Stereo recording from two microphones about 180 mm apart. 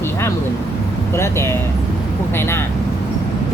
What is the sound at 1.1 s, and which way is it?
Speech, 15° left (ahead or behind).